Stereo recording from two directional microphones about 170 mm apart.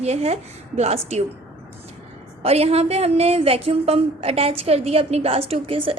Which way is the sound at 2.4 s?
35° right (ahead or behind).